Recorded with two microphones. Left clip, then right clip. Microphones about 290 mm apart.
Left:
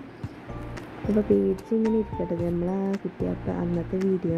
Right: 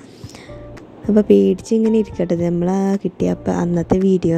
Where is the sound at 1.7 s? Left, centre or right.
Right.